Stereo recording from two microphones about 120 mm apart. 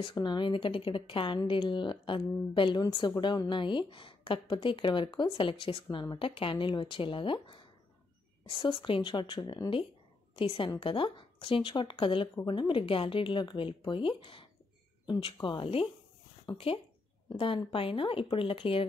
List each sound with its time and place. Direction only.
0.0 s speech: 40° left (ahead or behind)
10.4 s speech: 55° left (ahead or behind)